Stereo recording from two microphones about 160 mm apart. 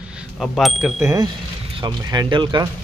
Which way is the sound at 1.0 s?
20° right (ahead or behind).